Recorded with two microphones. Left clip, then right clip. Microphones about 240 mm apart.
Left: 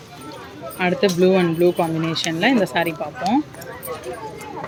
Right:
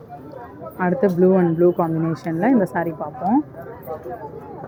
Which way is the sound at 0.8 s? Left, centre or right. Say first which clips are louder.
Even; centre.